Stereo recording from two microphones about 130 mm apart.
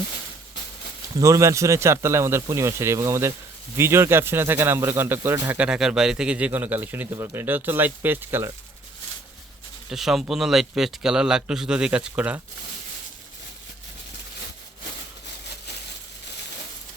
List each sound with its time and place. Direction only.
1.2 s speech: 25° right (ahead or behind)
9.9 s speech: centre (ahead or behind)